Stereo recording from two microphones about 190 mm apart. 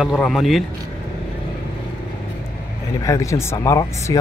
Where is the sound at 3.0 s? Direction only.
15° left (ahead or behind).